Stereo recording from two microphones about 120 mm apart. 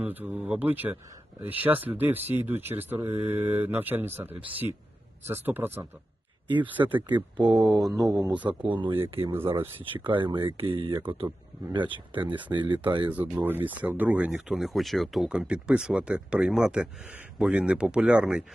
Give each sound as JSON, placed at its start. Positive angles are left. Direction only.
{"t": 0.0, "sound": "speech", "side_deg": -15}
{"t": 6.8, "sound": "speech", "side_deg": -40}
{"t": 7.5, "sound": "mantra", "side_deg": 0}
{"t": 8.3, "sound": "speech", "side_deg": -10}
{"t": 8.6, "sound": "speech", "side_deg": -45}
{"t": 13.1, "sound": "speech", "side_deg": -10}